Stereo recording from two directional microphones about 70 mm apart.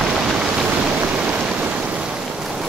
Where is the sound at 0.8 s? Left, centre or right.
Centre.